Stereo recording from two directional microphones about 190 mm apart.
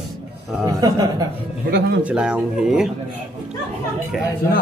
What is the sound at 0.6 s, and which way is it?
Speech, 20° right (ahead or behind).